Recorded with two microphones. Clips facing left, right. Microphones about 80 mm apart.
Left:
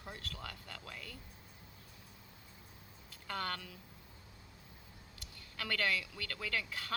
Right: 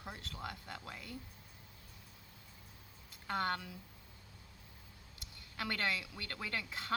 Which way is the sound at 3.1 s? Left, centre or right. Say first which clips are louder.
Right 4 dB; right.